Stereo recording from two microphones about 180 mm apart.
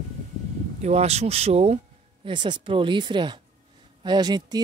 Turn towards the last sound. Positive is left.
turn(degrees=-25)  # may be behind; listen again after turning